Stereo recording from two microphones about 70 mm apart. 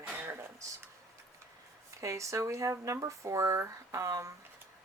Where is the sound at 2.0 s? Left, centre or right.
Right.